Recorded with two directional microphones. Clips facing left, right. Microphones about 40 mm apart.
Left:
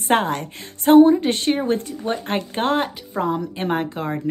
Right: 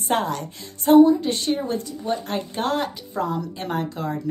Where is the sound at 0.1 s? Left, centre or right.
Left.